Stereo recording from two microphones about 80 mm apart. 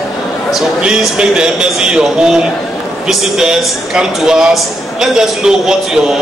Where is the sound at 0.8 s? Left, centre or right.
Centre.